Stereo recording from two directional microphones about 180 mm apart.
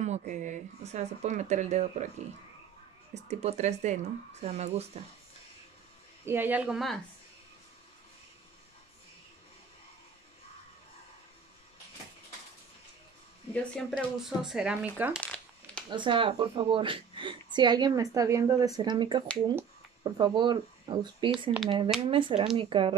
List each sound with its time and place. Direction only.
0.0 s speech: 40° right (ahead or behind)
6.2 s speech: 10° right (ahead or behind)
13.5 s speech: centre (ahead or behind)
15.1 s a sound: 5° left (ahead or behind)
15.9 s a woman's voice: 25° right (ahead or behind)